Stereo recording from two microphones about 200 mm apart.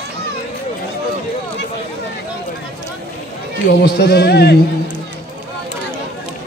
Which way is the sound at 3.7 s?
55° left (ahead or behind).